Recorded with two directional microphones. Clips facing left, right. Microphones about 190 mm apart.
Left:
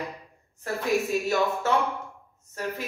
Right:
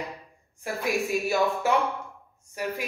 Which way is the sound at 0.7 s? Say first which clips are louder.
Left 2 dB; 10° right (ahead or behind).